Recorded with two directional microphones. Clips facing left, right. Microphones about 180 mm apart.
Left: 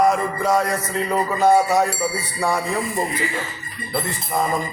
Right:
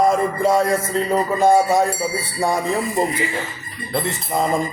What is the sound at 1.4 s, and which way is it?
Speech, 25° right (ahead or behind).